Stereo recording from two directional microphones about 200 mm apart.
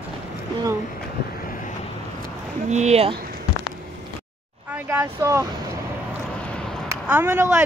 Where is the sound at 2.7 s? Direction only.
35° right (ahead or behind).